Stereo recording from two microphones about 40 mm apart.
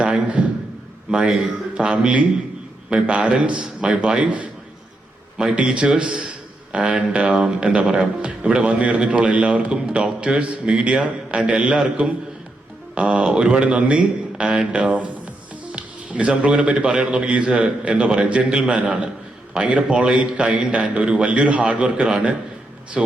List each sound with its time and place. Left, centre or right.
0.4 s a sound: right
1.1 s a man's voice: centre
4.2 s a man's voice: right
5.4 s a man's voice: centre
12.9 s a man's voice: right
15.6 s music: right
16.6 s a man's voice: right